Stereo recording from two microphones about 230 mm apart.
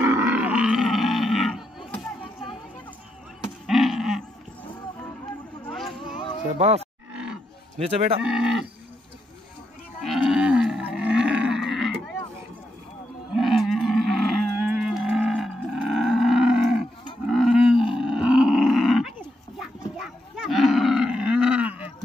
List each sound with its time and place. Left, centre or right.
0.0 s roar: centre
3.6 s a sound: centre
5.7 s a sound: centre
6.6 s a man's voice: right
7.1 s roar: centre
7.7 s a man's voice: right
8.2 s cattle: centre
10.0 s wild animals: centre
13.3 s cattle: centre
17.3 s roar: centre
19.6 s livestock: centre